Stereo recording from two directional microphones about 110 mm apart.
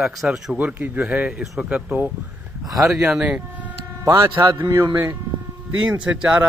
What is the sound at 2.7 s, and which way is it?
Speech, centre (ahead or behind).